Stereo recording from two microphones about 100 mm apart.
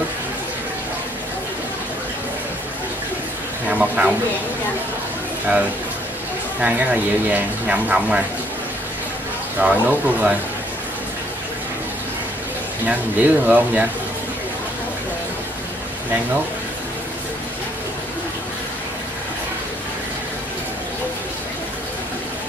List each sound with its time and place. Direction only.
3.7 s a sound: 15° right (ahead or behind)
6.6 s speech: 15° right (ahead or behind)
9.6 s speech: 15° right (ahead or behind)
12.8 s speech: 15° right (ahead or behind)